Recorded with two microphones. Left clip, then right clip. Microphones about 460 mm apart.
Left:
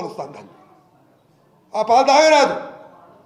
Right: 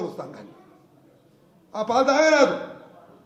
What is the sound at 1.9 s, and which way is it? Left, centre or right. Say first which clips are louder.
Mantra: left 6 dB; left.